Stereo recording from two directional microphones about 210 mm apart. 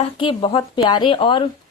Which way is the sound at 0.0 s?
25° left (ahead or behind).